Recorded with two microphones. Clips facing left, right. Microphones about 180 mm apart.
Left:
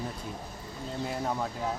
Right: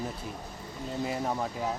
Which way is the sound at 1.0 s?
5° right (ahead or behind).